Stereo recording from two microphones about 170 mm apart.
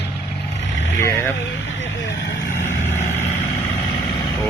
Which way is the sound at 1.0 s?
15° left (ahead or behind).